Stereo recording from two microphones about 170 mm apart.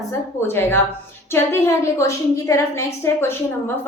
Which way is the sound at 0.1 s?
15° left (ahead or behind).